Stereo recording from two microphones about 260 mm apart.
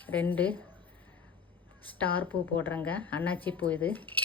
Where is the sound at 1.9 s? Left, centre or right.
Centre.